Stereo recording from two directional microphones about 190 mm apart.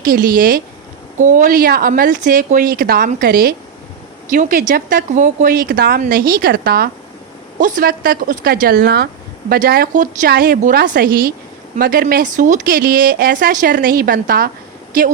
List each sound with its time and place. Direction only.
0.0 s a woman's voice: 50° right (ahead or behind)